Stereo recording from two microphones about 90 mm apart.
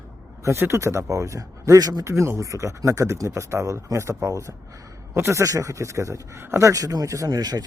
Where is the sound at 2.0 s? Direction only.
30° right (ahead or behind).